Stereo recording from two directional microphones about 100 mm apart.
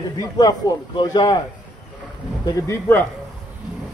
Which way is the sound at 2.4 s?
35° left (ahead or behind).